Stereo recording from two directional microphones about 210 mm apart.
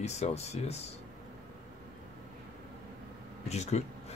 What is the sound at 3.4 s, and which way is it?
Speech, 30° left (ahead or behind).